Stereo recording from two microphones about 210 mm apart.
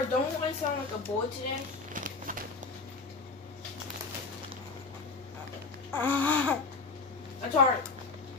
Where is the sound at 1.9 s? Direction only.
40° right (ahead or behind).